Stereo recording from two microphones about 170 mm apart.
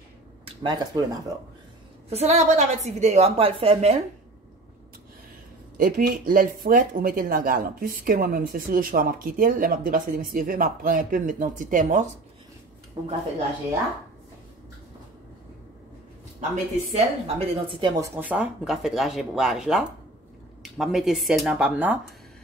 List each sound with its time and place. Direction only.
0.6 s speech: 25° right (ahead or behind)
2.0 s a woman's voice: 40° right (ahead or behind)
5.8 s speech: 55° right (ahead or behind)
13.0 s speech: 20° right (ahead or behind)
16.9 s speech: 35° right (ahead or behind); by 21.9 s 10° right (ahead or behind)